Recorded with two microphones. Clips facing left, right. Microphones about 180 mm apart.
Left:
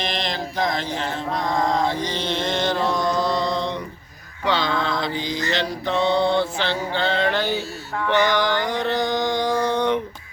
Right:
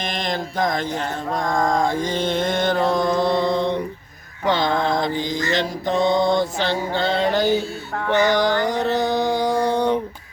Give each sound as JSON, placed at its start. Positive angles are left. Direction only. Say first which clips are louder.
{"t": 0.0, "sound": "mantra", "louder": "right 1 dB", "side_deg": -50}
{"t": 6.6, "sound": "music", "louder": "right 2 dB", "side_deg": -40}
{"t": 7.3, "sound": "a sound", "louder": "right 4 dB", "side_deg": -40}
{"t": 8.0, "sound": "music", "louder": "right 2 dB", "side_deg": -40}